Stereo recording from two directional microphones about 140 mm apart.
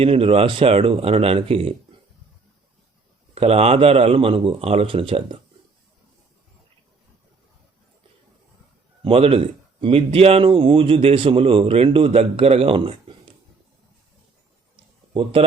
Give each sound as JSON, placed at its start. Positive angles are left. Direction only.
{"t": 0.0, "sound": "a man's voice", "side_deg": -40}
{"t": 3.3, "sound": "a man's voice", "side_deg": -45}
{"t": 9.0, "sound": "speech", "side_deg": -40}
{"t": 15.1, "sound": "speech", "side_deg": -40}